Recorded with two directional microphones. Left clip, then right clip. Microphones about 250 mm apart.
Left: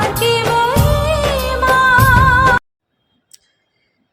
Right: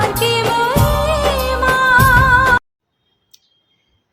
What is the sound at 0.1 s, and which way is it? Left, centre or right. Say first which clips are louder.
Music of bollywood: left 1 dB; centre.